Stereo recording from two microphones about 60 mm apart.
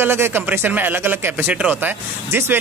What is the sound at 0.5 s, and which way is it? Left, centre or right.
A man's voice, right.